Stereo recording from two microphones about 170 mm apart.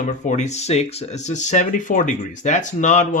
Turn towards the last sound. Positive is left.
turn(degrees=45)  # may be behind; listen again after turning